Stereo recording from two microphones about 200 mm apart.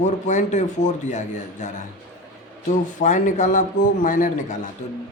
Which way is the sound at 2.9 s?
40° left (ahead or behind).